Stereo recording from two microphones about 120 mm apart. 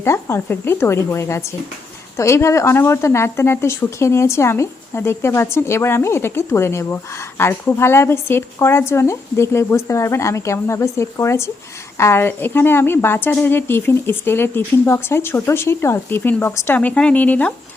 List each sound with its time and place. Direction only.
0.0 s speech: 20° left (ahead or behind)